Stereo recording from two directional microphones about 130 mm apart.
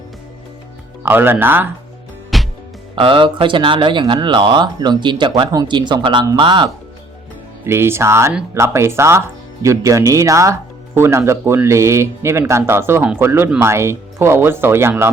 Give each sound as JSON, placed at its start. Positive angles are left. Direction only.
{"t": 1.0, "sound": "speech", "side_deg": -15}
{"t": 2.3, "sound": "music", "side_deg": 0}
{"t": 2.9, "sound": "speech", "side_deg": -40}
{"t": 7.6, "sound": "speech", "side_deg": -20}